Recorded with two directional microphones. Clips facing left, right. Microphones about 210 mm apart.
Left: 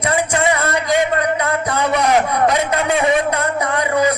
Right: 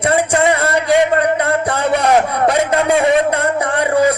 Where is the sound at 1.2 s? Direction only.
30° right (ahead or behind).